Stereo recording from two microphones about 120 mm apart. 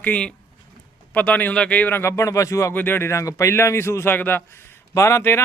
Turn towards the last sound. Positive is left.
turn(degrees=20)  # may be behind; listen again after turning